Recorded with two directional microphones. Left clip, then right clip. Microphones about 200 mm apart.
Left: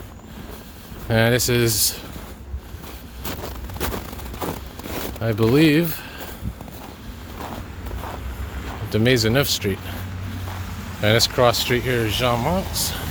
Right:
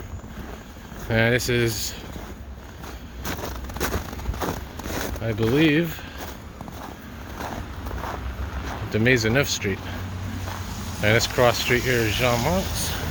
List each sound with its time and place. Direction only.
1.0 s speech: 30° left (ahead or behind)
3.2 s a sound: 5° right (ahead or behind)
5.2 s speech: 35° left (ahead or behind)
8.9 s speech: 25° left (ahead or behind)
11.0 s speech: 20° left (ahead or behind)